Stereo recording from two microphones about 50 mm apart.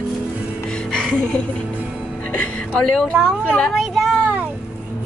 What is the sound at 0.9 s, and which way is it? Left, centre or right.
Music, centre.